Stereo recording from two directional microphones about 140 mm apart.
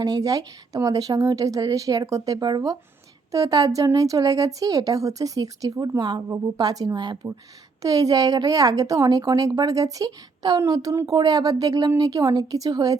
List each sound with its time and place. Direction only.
0.0 s a woman's voice: 25° right (ahead or behind)